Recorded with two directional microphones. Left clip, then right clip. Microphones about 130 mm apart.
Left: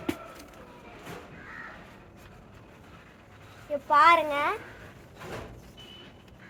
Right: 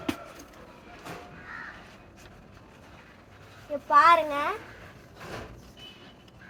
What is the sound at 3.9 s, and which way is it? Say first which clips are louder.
Speech: right 1 dB; 15° right (ahead or behind).